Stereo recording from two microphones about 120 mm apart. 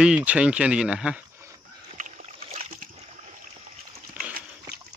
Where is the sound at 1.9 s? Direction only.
90° right.